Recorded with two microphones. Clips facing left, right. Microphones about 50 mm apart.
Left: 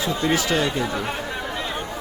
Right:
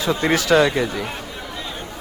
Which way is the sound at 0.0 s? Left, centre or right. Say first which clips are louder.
Right 3 dB; right.